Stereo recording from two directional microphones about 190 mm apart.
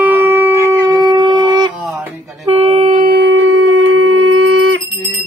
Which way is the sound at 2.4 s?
30° right (ahead or behind).